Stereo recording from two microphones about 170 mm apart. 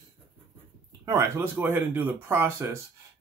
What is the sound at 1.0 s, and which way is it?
Speech, 15° right (ahead or behind).